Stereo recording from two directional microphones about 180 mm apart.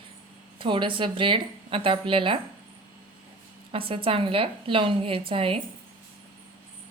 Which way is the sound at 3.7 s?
30° right (ahead or behind).